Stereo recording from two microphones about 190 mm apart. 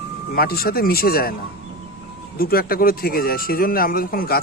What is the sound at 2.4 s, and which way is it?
Speech, 50° left (ahead or behind).